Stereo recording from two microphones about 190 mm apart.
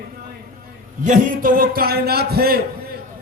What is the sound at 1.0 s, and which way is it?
Speech, 45° right (ahead or behind).